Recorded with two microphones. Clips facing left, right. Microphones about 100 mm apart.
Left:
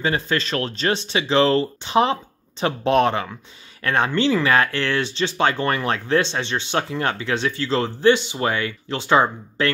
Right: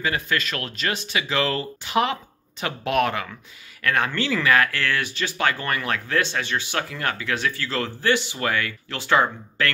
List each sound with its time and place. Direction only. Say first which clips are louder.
0.0 s speech: left 3 dB; 30° left (ahead or behind)